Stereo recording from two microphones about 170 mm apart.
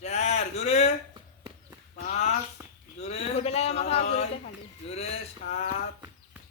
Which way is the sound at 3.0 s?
40° left (ahead or behind).